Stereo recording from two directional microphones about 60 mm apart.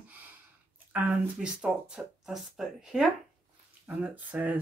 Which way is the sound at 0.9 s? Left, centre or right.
Right.